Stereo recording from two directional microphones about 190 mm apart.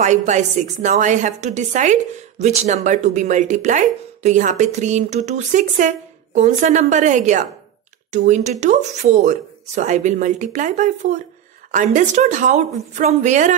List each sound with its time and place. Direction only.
0.0 s a woman's voice: 40° right (ahead or behind)